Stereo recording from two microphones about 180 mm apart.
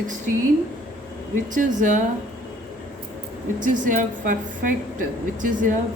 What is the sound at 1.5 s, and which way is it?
Speech, 45° right (ahead or behind).